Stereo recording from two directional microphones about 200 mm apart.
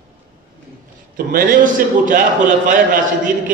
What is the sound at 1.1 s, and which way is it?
A man's voice, 45° right (ahead or behind).